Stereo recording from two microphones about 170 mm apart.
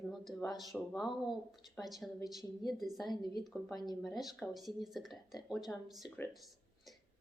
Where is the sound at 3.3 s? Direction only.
Centre (ahead or behind).